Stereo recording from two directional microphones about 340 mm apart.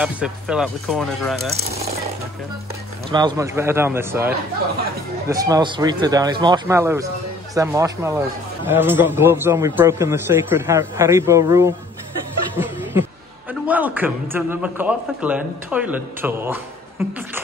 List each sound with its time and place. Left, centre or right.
0.0 s a man's voice: centre
1.5 s a man's voice: centre
3.1 s a man's voice: centre
5.3 s a man's voice: centre
13.5 s a man's voice: centre